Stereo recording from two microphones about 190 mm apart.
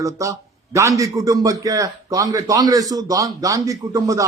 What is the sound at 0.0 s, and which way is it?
A man's voice, 15° right (ahead or behind).